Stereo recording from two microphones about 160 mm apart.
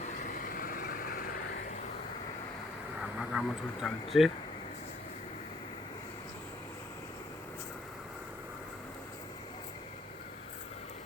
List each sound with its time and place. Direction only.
0.2 s vehicle: 60° left (ahead or behind)
3.2 s speech: centre (ahead or behind)